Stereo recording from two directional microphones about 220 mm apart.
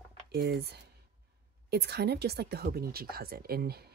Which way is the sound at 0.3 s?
50° right (ahead or behind).